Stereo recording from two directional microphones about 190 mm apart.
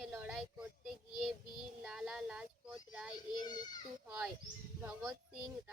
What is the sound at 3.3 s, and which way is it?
Baby cry, 20° left (ahead or behind).